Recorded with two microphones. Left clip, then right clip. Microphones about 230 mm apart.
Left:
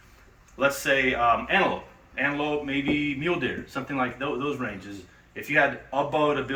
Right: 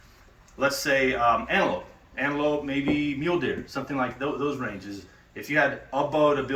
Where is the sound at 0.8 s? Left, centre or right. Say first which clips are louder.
Right 1 dB; centre.